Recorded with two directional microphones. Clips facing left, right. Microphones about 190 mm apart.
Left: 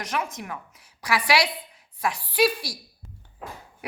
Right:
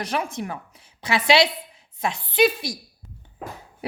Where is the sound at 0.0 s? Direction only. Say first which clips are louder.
Right 3 dB; 30° right (ahead or behind).